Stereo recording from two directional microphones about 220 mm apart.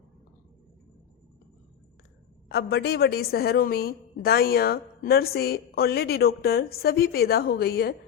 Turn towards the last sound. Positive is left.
turn(degrees=45)  # may be behind; listen again after turning